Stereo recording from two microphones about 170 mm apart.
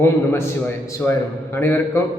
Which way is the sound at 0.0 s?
15° left (ahead or behind).